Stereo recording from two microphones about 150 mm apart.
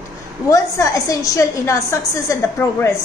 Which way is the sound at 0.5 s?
20° left (ahead or behind).